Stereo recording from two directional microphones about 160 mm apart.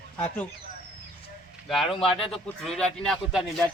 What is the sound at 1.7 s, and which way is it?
Speech, centre (ahead or behind).